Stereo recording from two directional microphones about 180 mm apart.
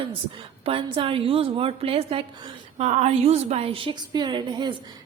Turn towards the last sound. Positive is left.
turn(degrees=-25)  # may be behind; listen again after turning